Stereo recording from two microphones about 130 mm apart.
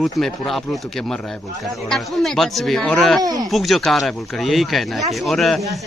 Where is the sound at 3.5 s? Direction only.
Centre (ahead or behind).